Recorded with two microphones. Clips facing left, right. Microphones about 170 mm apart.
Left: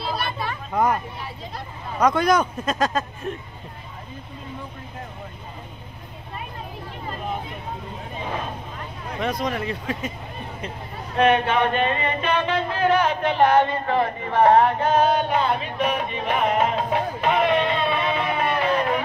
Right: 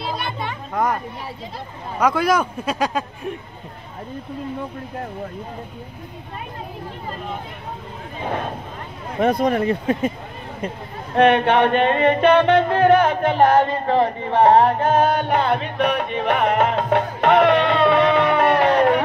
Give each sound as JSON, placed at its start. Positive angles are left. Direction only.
{"t": 0.0, "sound": "children playing", "side_deg": -20}
{"t": 2.0, "sound": "speech", "side_deg": -5}
{"t": 9.2, "sound": "speech", "side_deg": -55}
{"t": 11.1, "sound": "music", "side_deg": -65}
{"t": 14.8, "sound": "music", "side_deg": -50}